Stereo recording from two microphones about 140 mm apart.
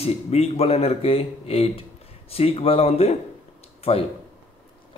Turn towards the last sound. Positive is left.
turn(degrees=45)  # may be behind; listen again after turning